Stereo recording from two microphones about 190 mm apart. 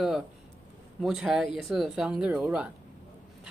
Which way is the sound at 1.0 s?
Centre (ahead or behind).